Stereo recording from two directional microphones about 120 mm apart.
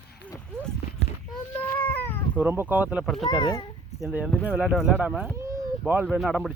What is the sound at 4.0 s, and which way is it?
Speech, 10° right (ahead or behind).